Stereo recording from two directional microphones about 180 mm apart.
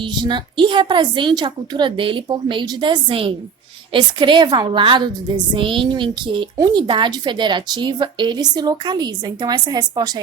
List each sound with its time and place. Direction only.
0.0 s a child's voice: 25° right (ahead or behind)